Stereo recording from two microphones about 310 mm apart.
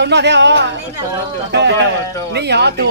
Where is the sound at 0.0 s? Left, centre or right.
Right.